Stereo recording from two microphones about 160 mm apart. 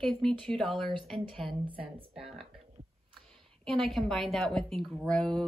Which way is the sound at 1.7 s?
35° right (ahead or behind).